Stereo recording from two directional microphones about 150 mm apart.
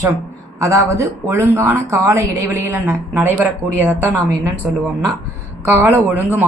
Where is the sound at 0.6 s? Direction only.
20° right (ahead or behind).